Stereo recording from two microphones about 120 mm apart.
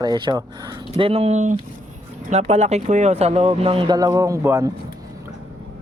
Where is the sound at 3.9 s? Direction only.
30° right (ahead or behind).